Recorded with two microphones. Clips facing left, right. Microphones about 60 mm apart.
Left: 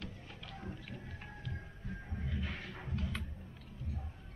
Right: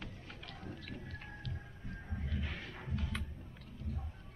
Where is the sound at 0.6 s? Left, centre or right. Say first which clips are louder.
Left 1 dB; centre.